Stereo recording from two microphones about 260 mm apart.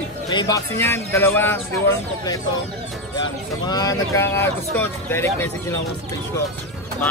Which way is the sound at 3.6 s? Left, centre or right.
Centre.